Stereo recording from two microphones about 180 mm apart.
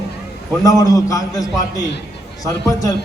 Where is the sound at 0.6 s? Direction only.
20° left (ahead or behind).